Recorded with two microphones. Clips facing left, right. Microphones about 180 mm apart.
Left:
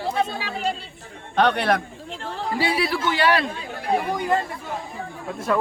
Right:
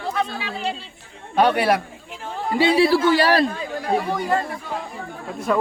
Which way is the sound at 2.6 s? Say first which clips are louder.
Right 8 dB; 30° right (ahead or behind).